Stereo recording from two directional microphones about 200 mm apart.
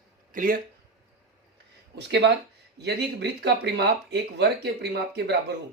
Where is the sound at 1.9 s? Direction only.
55° right (ahead or behind).